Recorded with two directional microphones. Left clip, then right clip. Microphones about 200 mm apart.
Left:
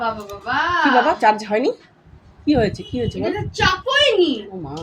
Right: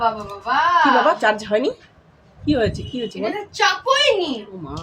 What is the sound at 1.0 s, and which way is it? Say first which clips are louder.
A woman's voice: left 1 dB; 5° right (ahead or behind).